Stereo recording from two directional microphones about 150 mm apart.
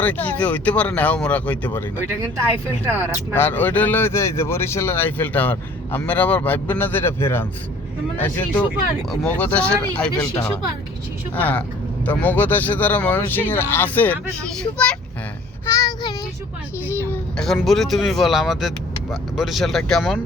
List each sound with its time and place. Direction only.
0.0 s speech: 10° left (ahead or behind)
3.3 s speech: 15° left (ahead or behind)
15.7 s child singing: 25° left (ahead or behind)
16.8 s speech: 15° left (ahead or behind)
17.3 s speech: 5° left (ahead or behind)